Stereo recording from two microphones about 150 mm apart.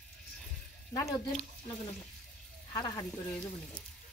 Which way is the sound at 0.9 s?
20° left (ahead or behind).